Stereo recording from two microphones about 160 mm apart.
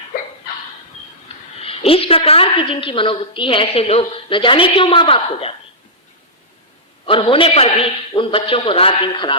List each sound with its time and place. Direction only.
1.6 s a woman's voice: 35° left (ahead or behind)
7.0 s a woman's voice: 35° left (ahead or behind)